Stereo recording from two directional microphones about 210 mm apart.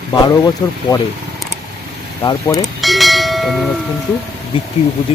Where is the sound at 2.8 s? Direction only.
Centre (ahead or behind).